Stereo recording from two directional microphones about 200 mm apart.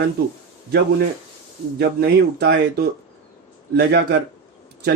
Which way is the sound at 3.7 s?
55° right (ahead or behind).